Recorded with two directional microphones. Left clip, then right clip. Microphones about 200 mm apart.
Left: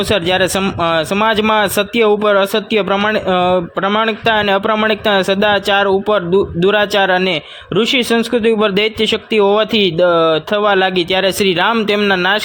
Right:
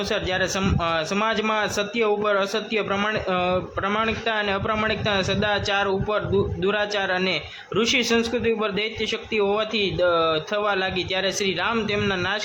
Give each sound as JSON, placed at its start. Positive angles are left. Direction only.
{"t": 0.1, "sound": "a man's voice", "side_deg": 45}